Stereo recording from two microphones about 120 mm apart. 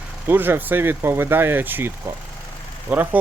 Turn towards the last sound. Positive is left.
turn(degrees=-15)  # may be behind; listen again after turning